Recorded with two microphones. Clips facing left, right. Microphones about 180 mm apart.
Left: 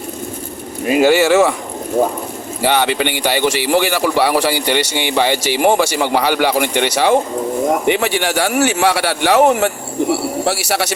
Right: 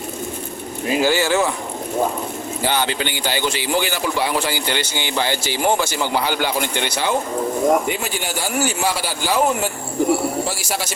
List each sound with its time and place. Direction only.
0.9 s speech: 65° left (ahead or behind)
2.6 s speech: 70° left (ahead or behind)